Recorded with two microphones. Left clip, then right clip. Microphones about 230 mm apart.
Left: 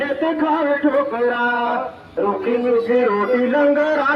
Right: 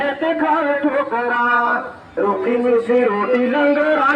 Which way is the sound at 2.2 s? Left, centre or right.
Right.